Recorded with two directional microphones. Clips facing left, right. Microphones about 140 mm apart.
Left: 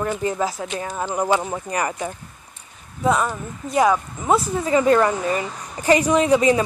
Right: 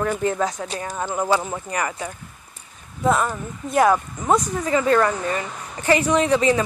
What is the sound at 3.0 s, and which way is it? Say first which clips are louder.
Speech: even; centre (ahead or behind).